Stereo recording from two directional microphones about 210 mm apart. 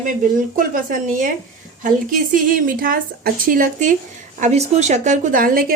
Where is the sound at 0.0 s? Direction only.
40° right (ahead or behind).